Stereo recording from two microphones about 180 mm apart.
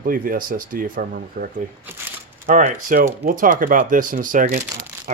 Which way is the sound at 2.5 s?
45° right (ahead or behind).